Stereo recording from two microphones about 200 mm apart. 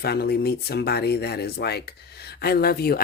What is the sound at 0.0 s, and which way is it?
Speech, 50° left (ahead or behind).